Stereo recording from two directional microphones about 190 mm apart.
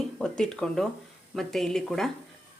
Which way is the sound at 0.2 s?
5° left (ahead or behind).